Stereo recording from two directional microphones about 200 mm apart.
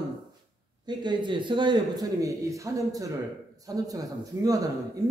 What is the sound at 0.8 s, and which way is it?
A man's voice, 20° right (ahead or behind).